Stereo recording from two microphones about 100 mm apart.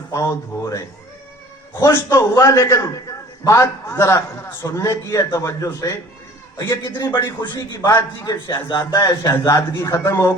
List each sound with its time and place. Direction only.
0.1 s a man's voice: 30° left (ahead or behind)